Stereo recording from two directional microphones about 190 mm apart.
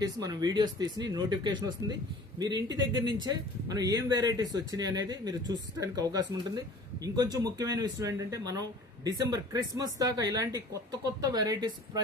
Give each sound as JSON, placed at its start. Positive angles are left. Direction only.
{"t": 0.0, "sound": "speech", "side_deg": -20}